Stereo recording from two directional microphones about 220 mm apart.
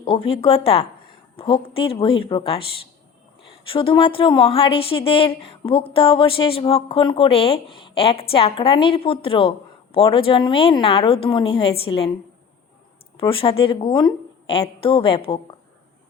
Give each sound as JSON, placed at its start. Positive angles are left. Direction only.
{"t": 0.0, "sound": "speech", "side_deg": 25}
{"t": 3.7, "sound": "speech", "side_deg": 25}
{"t": 13.1, "sound": "speech", "side_deg": 25}